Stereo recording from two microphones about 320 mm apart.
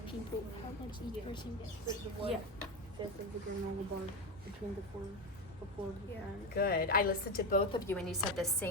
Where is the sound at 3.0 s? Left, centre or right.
Centre.